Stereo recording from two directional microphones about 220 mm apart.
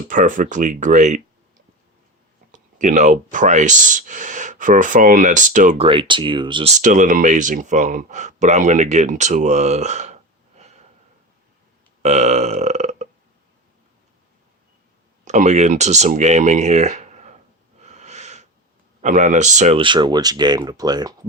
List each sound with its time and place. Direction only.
0.1 s speech: 35° right (ahead or behind)
12.0 s burping: 30° right (ahead or behind)
15.2 s speech: 35° right (ahead or behind)
17.7 s wheeze: 30° right (ahead or behind)
19.0 s speech: 35° right (ahead or behind); by 21.2 s 20° right (ahead or behind)